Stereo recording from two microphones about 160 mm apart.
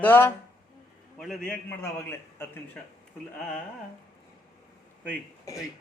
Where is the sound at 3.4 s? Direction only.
5° left (ahead or behind).